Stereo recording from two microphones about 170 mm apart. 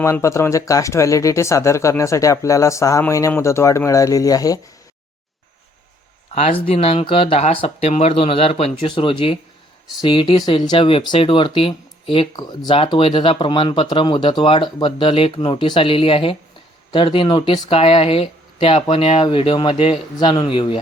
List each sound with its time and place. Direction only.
0.0 s speech: 15° left (ahead or behind)
6.3 s speech: 35° left (ahead or behind)